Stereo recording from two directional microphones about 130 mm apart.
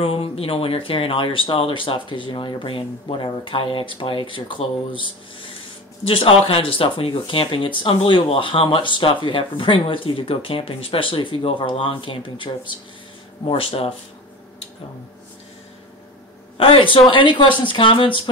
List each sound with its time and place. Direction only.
0.0 s speech: 45° left (ahead or behind)
16.5 s speech: 45° left (ahead or behind)